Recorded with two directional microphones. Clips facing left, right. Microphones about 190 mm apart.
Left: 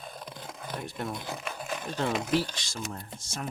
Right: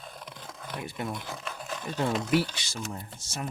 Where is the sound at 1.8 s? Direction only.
5° right (ahead or behind).